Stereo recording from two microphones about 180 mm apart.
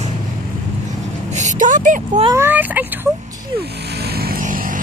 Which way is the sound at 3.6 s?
65° right (ahead or behind).